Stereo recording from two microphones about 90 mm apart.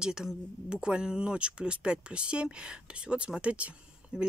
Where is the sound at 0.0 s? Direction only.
5° right (ahead or behind).